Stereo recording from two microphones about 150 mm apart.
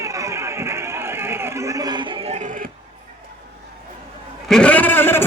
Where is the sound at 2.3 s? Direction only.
55° right (ahead or behind).